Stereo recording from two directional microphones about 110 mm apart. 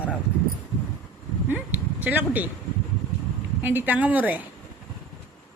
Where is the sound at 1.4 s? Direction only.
15° right (ahead or behind).